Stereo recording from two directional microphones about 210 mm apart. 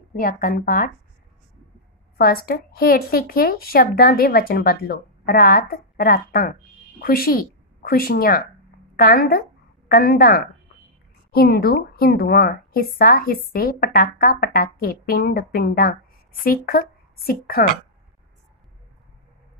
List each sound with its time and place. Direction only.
0.1 s speech: 40° left (ahead or behind)
2.1 s a woman's voice: 45° left (ahead or behind)